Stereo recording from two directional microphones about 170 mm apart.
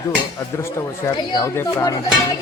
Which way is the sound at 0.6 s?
20° left (ahead or behind).